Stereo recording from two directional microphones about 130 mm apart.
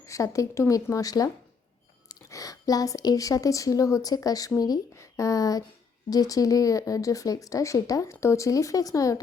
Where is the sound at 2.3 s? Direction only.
25° left (ahead or behind).